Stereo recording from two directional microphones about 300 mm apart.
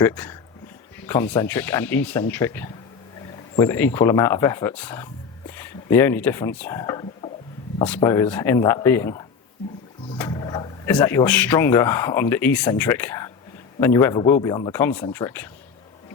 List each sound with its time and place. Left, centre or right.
0.0 s speech: centre